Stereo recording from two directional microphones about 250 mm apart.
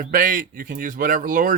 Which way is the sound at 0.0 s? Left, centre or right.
Right.